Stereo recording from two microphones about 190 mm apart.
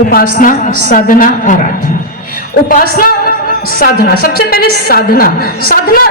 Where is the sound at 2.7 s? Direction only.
50° left (ahead or behind).